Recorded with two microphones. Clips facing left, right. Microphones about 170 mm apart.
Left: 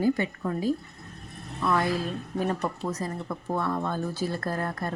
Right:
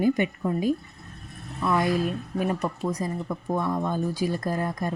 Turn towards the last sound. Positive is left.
turn(degrees=-15)  # may be behind; listen again after turning